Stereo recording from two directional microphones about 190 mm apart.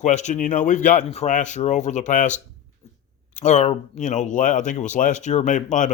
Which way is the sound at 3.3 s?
40° left (ahead or behind).